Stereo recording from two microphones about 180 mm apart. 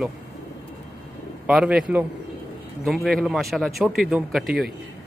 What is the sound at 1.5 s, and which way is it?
Speech, 5° right (ahead or behind).